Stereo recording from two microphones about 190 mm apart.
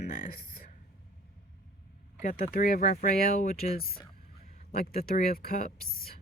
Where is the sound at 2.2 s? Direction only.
45° left (ahead or behind).